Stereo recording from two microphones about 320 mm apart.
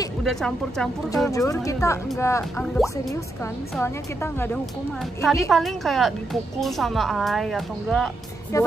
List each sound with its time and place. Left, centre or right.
0.2 s a woman's voice: centre